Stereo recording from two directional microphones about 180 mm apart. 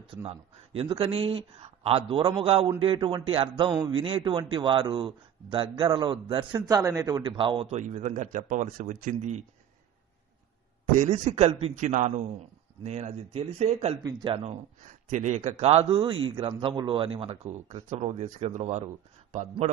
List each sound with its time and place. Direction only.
0.2 s a man's voice: 35° right (ahead or behind)
11.1 s speech: 35° right (ahead or behind)
14.0 s a man's voice: 25° right (ahead or behind)
15.0 s speech: 40° right (ahead or behind)